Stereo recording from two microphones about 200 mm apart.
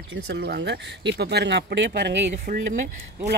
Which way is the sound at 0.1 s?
55° right (ahead or behind).